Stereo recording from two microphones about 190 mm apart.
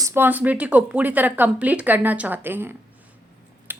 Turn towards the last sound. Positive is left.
turn(degrees=-10)  # may be behind; listen again after turning